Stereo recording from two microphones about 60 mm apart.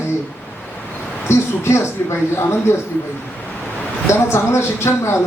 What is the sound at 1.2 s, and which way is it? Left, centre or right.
Speech, left.